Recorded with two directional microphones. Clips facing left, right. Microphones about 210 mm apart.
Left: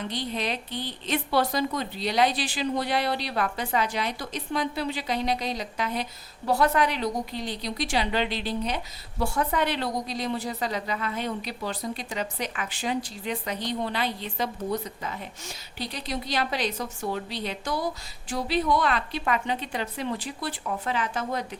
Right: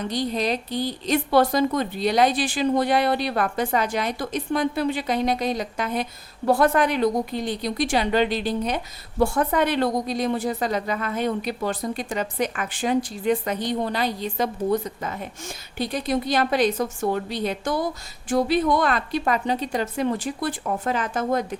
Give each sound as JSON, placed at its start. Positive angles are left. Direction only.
{"t": 0.0, "sound": "a woman's voice", "side_deg": -40}